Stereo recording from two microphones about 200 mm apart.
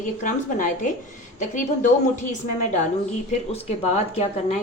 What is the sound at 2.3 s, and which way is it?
Speech, 35° left (ahead or behind).